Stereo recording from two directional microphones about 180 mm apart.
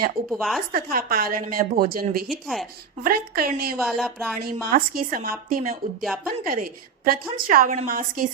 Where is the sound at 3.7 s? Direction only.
Centre (ahead or behind).